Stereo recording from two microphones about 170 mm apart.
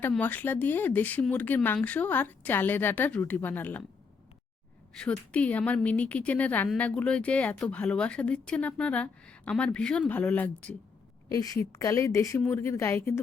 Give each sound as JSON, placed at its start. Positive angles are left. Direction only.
{"t": 0.1, "sound": "speech", "side_deg": 10}
{"t": 4.9, "sound": "speech", "side_deg": 5}
{"t": 11.3, "sound": "a woman's voice", "side_deg": 20}